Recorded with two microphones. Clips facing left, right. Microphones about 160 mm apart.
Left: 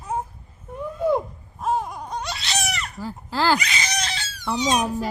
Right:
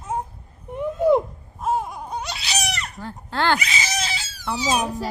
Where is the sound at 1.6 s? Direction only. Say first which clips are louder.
Even; 5° right (ahead or behind).